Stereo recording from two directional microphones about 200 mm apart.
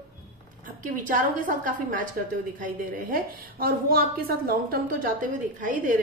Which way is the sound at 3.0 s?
45° right (ahead or behind).